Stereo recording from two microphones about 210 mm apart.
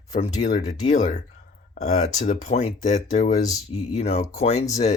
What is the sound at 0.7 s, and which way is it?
Speech, 35° left (ahead or behind).